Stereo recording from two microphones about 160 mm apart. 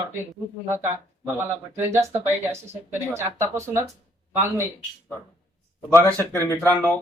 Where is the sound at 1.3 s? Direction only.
15° right (ahead or behind).